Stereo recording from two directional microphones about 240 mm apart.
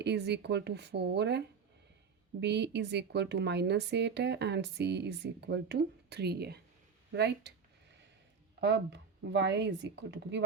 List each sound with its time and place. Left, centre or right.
0.0 s speech: right
2.4 s speech: right
8.6 s speech: right